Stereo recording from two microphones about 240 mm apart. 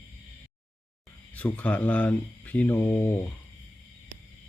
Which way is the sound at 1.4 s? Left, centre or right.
Centre.